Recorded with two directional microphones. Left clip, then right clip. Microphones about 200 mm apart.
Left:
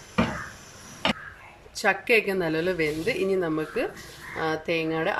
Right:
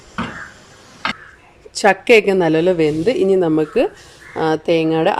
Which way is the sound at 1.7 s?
40° right (ahead or behind).